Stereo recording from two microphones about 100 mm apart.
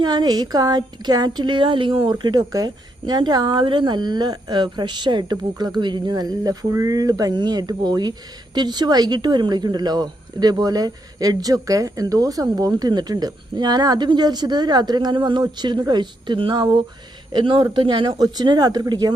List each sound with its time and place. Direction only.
0.0 s speech: 45° right (ahead or behind)